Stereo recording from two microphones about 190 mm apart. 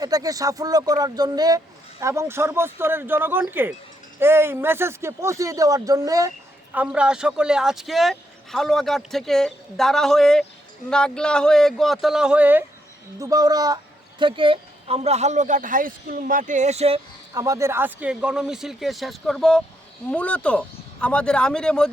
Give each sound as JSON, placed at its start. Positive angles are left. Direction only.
{"t": 0.0, "sound": "speech", "side_deg": -20}
{"t": 6.7, "sound": "speech", "side_deg": -5}
{"t": 17.3, "sound": "speech", "side_deg": -20}